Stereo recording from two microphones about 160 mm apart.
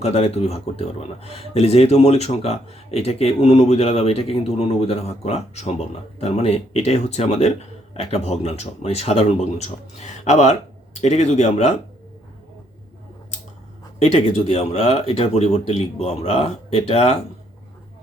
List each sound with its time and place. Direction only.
0.0 s speech: 40° left (ahead or behind)
14.0 s speech: 40° left (ahead or behind)